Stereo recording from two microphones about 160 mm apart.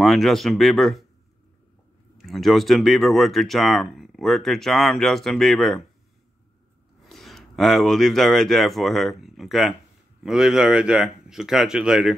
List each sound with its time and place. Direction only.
0.0 s speech: centre (ahead or behind)
2.1 s speech: centre (ahead or behind)
7.0 s speech: centre (ahead or behind)